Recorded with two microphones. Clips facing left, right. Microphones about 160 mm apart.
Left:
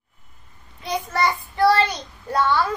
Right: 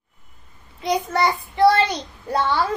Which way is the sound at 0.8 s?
25° right (ahead or behind).